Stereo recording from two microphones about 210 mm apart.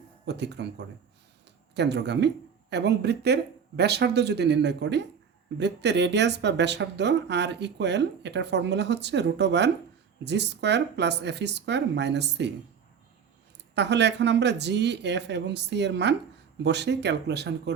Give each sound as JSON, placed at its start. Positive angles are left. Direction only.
{"t": 0.3, "sound": "speech", "side_deg": -55}
{"t": 13.7, "sound": "speech", "side_deg": -55}